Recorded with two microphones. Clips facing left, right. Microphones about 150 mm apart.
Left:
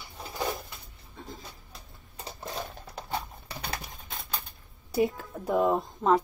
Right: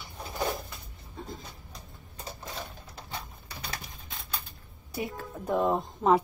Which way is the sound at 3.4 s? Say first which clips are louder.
Left 4 dB; 60° left (ahead or behind).